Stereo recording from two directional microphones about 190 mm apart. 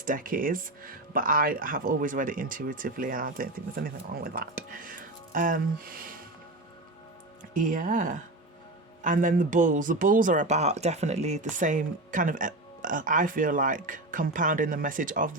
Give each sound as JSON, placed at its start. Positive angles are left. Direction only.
{"t": 0.0, "sound": "speech", "side_deg": -45}
{"t": 7.5, "sound": "speech", "side_deg": -45}